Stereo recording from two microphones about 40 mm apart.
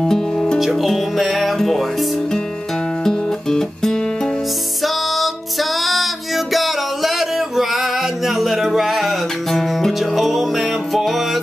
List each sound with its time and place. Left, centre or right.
0.0 s music: centre
0.6 s music: centre
4.8 s music: centre